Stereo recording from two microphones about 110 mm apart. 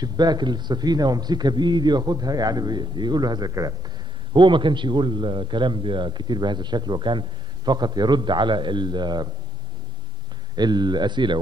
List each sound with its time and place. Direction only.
0.0 s a man's voice: 40° right (ahead or behind)
4.3 s a man's voice: 45° right (ahead or behind)
10.5 s a man's voice: 40° right (ahead or behind)